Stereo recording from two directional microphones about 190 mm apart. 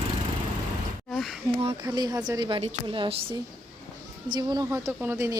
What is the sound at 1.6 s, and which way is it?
Speech, 30° right (ahead or behind).